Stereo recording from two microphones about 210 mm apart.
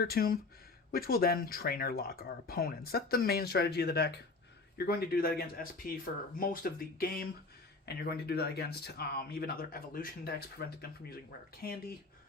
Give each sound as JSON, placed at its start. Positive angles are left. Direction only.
{"t": 0.0, "sound": "speech", "side_deg": 45}